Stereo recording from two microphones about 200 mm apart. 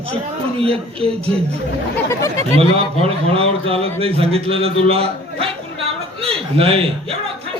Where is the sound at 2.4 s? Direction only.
30° right (ahead or behind).